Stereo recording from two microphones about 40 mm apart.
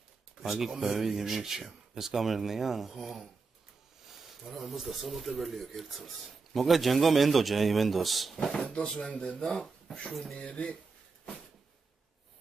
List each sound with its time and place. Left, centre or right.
0.4 s speech: centre
3.0 s a man's voice: centre
8.4 s speech: centre
10.5 s speech: left